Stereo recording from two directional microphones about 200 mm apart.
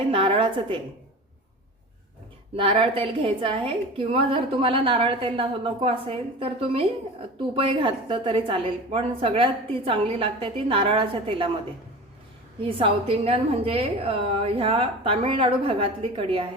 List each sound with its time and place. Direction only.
0.1 s a woman's voice: 25° right (ahead or behind)
2.6 s a woman's voice: 25° right (ahead or behind)
12.6 s a woman's voice: 30° right (ahead or behind)